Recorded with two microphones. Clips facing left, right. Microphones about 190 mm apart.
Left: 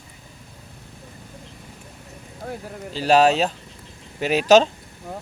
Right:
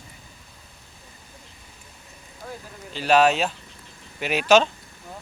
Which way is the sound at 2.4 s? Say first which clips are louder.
Left 5 dB; 45° left (ahead or behind).